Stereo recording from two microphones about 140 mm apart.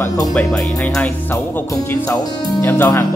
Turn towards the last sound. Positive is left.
turn(degrees=20)  # may be behind; listen again after turning